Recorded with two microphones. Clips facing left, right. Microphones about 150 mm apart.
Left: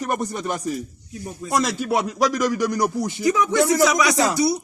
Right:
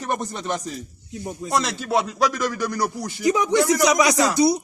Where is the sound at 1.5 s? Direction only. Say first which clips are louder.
Left 1 dB; 10° left (ahead or behind).